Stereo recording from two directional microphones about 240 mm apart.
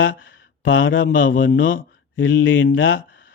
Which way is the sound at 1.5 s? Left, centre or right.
Left.